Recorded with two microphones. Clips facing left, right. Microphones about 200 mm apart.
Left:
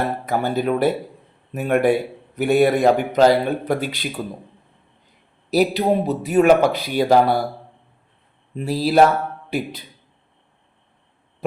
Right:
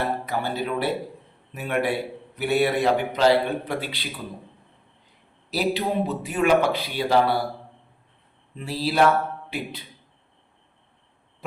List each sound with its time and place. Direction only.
0.3 s a man's voice: 45° left (ahead or behind)
5.5 s a man's voice: 40° left (ahead or behind)
8.5 s speech: 40° left (ahead or behind)